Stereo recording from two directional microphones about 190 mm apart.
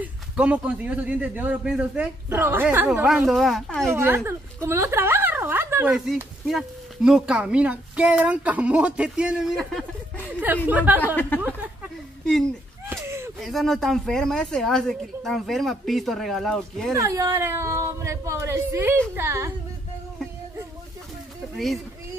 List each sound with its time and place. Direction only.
0.0 s a man's voice: 5° right (ahead or behind)
3.9 s speech: 10° right (ahead or behind); by 10.3 s 5° left (ahead or behind)
10.7 s a man's voice: 10° right (ahead or behind)
11.1 s speech: 10° left (ahead or behind)
12.9 s a sound: 15° right (ahead or behind)
13.4 s speech: centre (ahead or behind)
16.9 s a man's voice: 15° right (ahead or behind)